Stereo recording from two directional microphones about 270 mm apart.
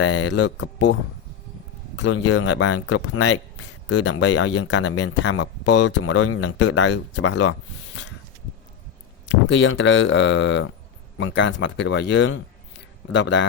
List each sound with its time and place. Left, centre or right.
0.0 s speech: left
2.0 s speech: left
9.3 s speech: left